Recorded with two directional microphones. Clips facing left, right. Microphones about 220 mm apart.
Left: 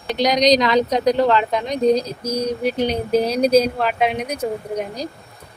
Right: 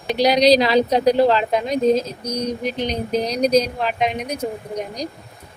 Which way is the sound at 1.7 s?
Centre (ahead or behind).